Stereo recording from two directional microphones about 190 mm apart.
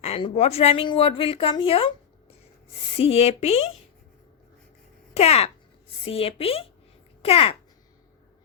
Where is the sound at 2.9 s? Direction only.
30° left (ahead or behind).